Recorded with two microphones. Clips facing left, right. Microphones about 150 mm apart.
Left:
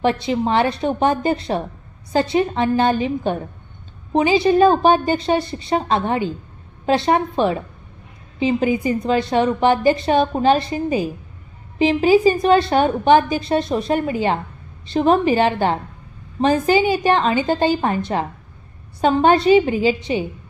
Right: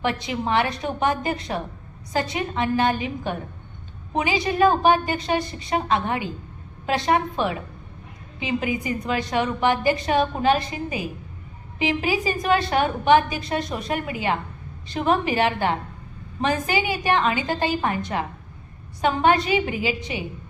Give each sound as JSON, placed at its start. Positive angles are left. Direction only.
{"t": 0.0, "sound": "a woman's voice", "side_deg": 30}